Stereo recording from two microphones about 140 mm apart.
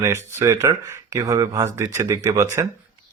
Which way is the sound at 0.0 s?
20° right (ahead or behind).